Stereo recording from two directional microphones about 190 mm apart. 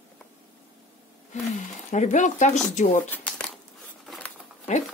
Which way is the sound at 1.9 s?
40° left (ahead or behind).